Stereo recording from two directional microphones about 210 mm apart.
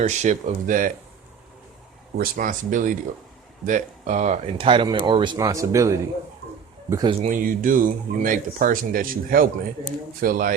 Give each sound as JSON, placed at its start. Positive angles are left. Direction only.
{"t": 0.0, "sound": "speech", "side_deg": -35}
{"t": 2.1, "sound": "speech", "side_deg": -45}
{"t": 7.2, "sound": "speech", "side_deg": -40}